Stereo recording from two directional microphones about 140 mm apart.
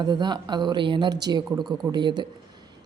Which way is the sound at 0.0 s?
30° right (ahead or behind).